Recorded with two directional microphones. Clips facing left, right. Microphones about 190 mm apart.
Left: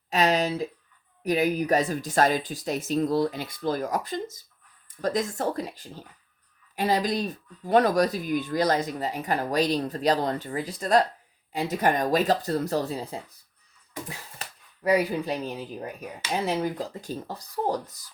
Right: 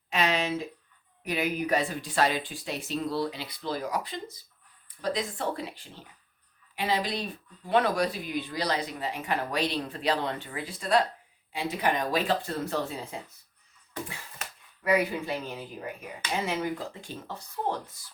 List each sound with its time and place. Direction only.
0.1 s a sound: 40° left (ahead or behind)
1.2 s speech: 40° left (ahead or behind)
14.8 s speech: 35° left (ahead or behind)